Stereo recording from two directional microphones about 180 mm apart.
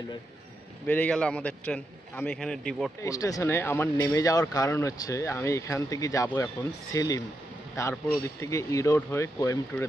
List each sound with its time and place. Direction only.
0.8 s speech: 10° left (ahead or behind)
3.0 s speech: 20° left (ahead or behind)